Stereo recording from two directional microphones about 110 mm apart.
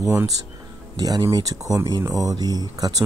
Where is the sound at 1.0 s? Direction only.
35° right (ahead or behind).